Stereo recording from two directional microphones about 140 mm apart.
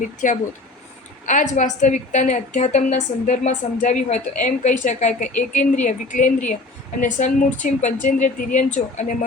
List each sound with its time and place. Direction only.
0.2 s a woman's voice: 70° left (ahead or behind)